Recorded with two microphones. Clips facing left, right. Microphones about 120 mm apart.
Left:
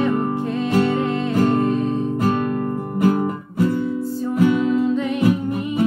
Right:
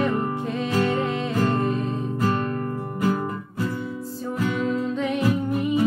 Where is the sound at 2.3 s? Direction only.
15° left (ahead or behind).